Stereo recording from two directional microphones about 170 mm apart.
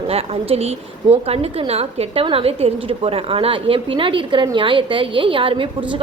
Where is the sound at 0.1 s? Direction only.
35° right (ahead or behind).